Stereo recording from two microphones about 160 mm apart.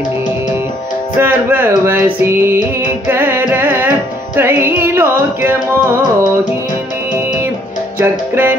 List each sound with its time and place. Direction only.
1.2 s music: 10° right (ahead or behind)
8.0 s music: 15° right (ahead or behind)